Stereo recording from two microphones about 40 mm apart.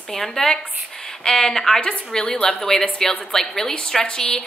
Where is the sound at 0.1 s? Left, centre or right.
Centre.